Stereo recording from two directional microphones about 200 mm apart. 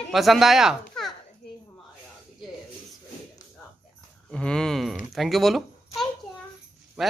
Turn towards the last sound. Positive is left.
turn(degrees=0)  # may be behind; listen again after turning